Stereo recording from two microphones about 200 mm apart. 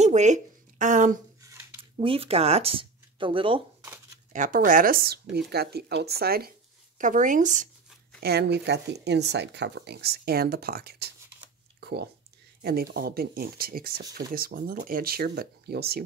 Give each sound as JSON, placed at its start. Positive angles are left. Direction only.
{"t": 0.0, "sound": "speech", "side_deg": -35}
{"t": 1.4, "sound": "a sound", "side_deg": -10}
{"t": 1.8, "sound": "speech", "side_deg": -25}
{"t": 4.3, "sound": "speech", "side_deg": -40}
{"t": 8.2, "sound": "speech", "side_deg": -55}
{"t": 11.8, "sound": "a sound", "side_deg": -55}
{"t": 12.6, "sound": "speech", "side_deg": -50}